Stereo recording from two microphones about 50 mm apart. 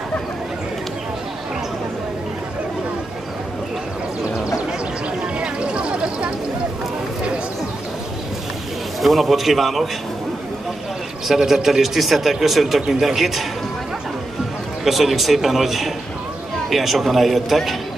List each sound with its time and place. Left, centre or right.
5.4 s a sound: right
9.0 s a man's voice: centre
11.2 s a man's voice: centre
14.9 s a man's voice: centre